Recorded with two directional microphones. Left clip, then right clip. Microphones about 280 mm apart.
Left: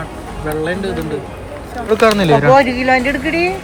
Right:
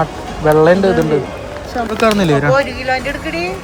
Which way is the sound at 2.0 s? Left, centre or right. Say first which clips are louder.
Left 2 dB; centre.